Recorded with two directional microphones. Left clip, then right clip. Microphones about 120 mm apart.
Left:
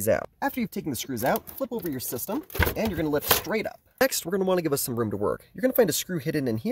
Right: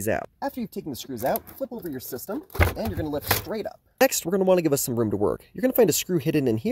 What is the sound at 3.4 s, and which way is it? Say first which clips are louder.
Speech: left 2 dB; 60° left (ahead or behind).